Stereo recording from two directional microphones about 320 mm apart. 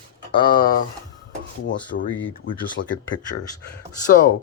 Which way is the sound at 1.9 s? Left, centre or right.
Left.